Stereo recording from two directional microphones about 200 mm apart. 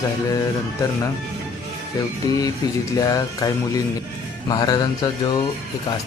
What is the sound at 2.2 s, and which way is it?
Speech, 20° left (ahead or behind).